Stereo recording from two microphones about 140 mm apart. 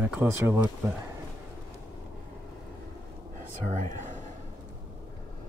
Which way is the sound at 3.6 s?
60° right (ahead or behind).